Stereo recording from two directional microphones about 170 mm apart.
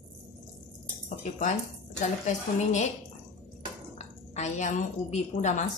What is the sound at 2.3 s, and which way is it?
Speech, 45° left (ahead or behind).